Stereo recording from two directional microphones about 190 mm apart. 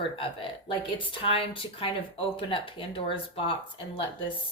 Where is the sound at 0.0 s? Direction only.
25° left (ahead or behind).